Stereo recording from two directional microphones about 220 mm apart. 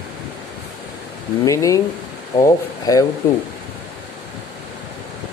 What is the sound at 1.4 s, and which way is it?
Speech, 15° left (ahead or behind).